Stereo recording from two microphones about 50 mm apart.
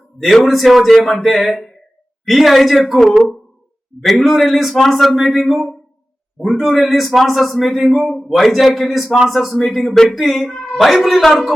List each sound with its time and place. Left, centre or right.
0.2 s a man's voice: centre